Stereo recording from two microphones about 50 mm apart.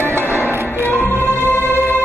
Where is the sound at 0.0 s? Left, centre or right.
Left.